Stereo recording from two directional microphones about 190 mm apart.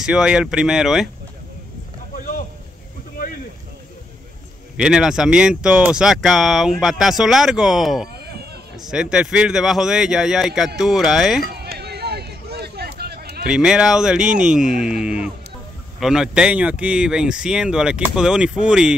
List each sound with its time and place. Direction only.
0.0 s speech: 5° right (ahead or behind)
2.1 s a sound: 45° left (ahead or behind)
4.7 s speech: 5° right (ahead or behind)
11.5 s hubbub: 60° right (ahead or behind)
13.5 s speech: 5° right (ahead or behind)